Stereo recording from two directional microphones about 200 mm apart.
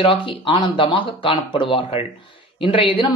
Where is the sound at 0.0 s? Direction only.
25° left (ahead or behind).